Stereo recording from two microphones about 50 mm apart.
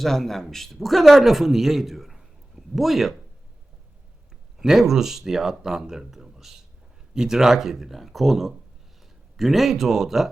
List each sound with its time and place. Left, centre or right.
0.0 s speech: centre
4.5 s speech: centre